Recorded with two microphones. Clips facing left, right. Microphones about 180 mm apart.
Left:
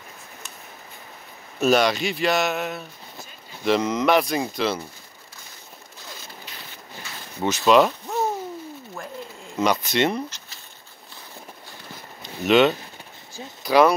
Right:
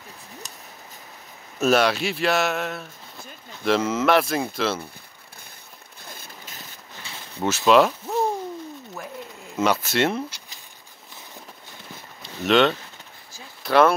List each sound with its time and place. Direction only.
1.6 s speech: centre (ahead or behind)
6.0 s boat: 55° right (ahead or behind)
7.4 s speech: 5° right (ahead or behind)
9.6 s speech: 5° right (ahead or behind)
12.2 s a sound: 5° left (ahead or behind)
13.6 s speech: centre (ahead or behind)